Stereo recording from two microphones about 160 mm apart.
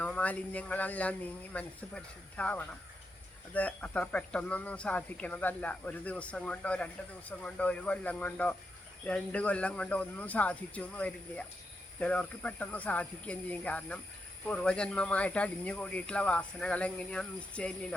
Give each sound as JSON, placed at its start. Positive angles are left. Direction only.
{"t": 0.0, "sound": "speech", "side_deg": 10}